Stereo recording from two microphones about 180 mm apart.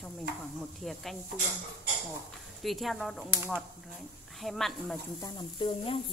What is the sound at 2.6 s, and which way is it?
Speech, centre (ahead or behind).